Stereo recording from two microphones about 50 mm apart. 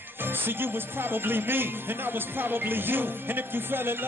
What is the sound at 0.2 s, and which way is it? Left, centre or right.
Speech, right.